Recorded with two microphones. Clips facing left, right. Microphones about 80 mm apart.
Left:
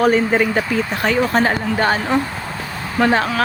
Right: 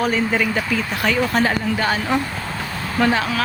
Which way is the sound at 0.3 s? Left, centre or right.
Left.